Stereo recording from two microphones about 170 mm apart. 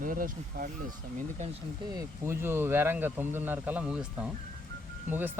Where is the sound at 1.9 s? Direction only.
20° right (ahead or behind).